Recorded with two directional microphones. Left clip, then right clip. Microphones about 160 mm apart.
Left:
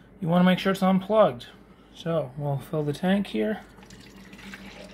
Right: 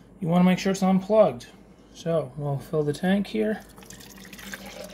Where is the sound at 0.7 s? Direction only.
10° left (ahead or behind).